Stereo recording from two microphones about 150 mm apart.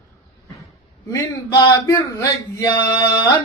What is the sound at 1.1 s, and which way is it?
Speech, 20° left (ahead or behind).